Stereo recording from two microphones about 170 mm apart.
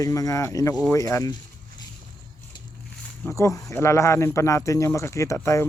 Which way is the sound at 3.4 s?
20° left (ahead or behind).